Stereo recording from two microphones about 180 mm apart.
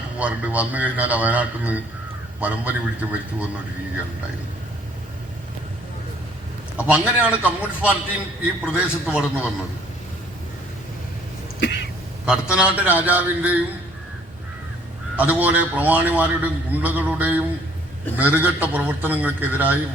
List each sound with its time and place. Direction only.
0.2 s a man's voice: 10° right (ahead or behind)
6.7 s a man's voice: 5° right (ahead or behind)
11.6 s throat clearing: 70° left (ahead or behind)
12.2 s a man's voice: 5° right (ahead or behind)
15.1 s a man's voice: 10° right (ahead or behind)